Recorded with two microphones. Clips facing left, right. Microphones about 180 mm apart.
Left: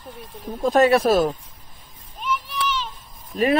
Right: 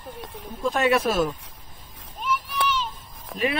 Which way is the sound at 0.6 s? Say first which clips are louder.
Left 5 dB; 40° left (ahead or behind).